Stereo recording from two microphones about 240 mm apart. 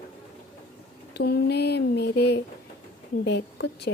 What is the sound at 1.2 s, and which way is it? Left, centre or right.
Speech, left.